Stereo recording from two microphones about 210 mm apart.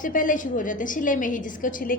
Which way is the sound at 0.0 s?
40° left (ahead or behind).